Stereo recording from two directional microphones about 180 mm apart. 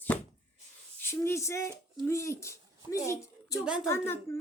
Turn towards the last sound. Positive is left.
turn(degrees=15)  # may be behind; listen again after turning